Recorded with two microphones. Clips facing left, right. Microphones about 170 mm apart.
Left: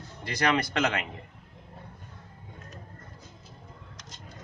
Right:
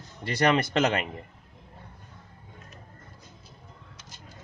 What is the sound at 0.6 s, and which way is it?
Speech, 45° right (ahead or behind).